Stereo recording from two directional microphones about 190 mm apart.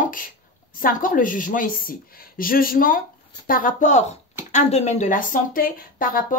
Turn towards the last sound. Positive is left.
turn(degrees=50)  # may be behind; listen again after turning